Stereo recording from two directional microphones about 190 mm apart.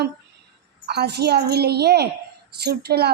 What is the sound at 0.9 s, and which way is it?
A woman's voice, 60° right (ahead or behind).